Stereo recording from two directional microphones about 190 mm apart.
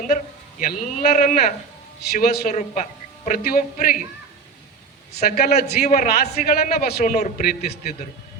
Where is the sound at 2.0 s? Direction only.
55° left (ahead or behind).